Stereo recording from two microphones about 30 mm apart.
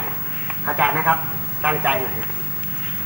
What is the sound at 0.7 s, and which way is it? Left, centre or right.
A man's voice, right.